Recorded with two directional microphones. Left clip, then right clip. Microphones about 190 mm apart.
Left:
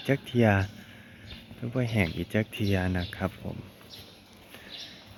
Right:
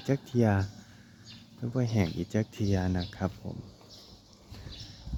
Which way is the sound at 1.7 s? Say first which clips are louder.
Left 3 dB; 20° right (ahead or behind).